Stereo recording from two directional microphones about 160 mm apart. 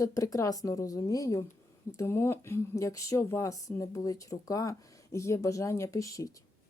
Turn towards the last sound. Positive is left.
turn(degrees=20)  # may be behind; listen again after turning